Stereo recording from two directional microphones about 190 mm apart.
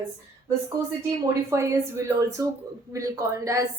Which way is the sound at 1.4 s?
15° right (ahead or behind).